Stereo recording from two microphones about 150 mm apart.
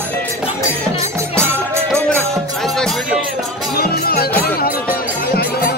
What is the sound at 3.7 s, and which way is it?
Music, 90° left.